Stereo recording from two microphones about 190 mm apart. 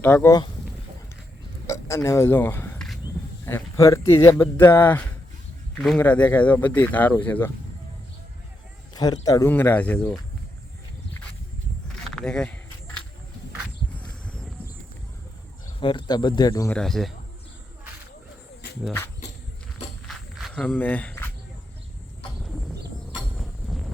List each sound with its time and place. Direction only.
0.0 s speech: 10° left (ahead or behind)
1.6 s a sound: 15° left (ahead or behind)
3.4 s speech: 15° left (ahead or behind)
9.0 s speech: 20° left (ahead or behind)
11.9 s a sound: centre (ahead or behind)
14.0 s a sound: 5° left (ahead or behind)
15.8 s speech: 25° left (ahead or behind)
16.7 s speech: centre (ahead or behind)
20.1 s walk: centre (ahead or behind)
23.1 s train: centre (ahead or behind)